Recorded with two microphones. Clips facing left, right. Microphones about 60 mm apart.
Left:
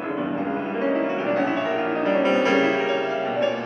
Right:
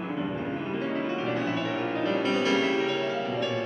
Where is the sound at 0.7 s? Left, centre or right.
Left.